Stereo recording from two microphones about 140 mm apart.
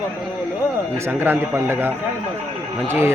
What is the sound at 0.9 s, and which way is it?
Speech, 20° right (ahead or behind).